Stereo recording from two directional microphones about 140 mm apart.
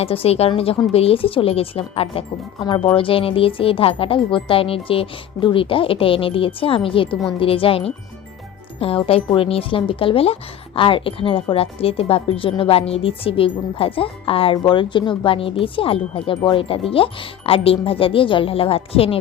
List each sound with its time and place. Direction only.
0.0 s speech: 45° left (ahead or behind)
2.6 s a woman's voice: 30° left (ahead or behind)